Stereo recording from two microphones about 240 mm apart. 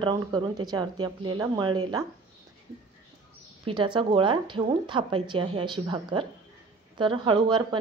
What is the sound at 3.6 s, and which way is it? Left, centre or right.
Speech, centre.